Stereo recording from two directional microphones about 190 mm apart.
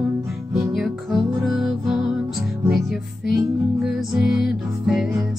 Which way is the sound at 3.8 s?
Centre (ahead or behind).